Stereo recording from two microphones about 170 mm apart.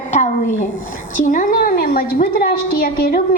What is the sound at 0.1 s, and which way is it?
A woman's voice, 45° left (ahead or behind).